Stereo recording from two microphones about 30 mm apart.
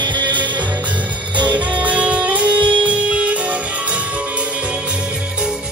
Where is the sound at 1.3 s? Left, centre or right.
Right.